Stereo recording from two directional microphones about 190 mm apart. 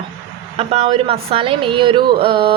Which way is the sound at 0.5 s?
35° right (ahead or behind).